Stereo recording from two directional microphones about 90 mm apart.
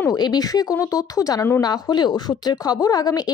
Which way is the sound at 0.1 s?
50° left (ahead or behind).